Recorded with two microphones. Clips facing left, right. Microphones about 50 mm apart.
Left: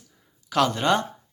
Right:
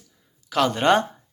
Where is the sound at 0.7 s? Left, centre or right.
Right.